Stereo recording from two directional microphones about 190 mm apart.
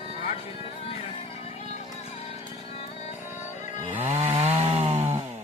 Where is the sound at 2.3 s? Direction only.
25° right (ahead or behind).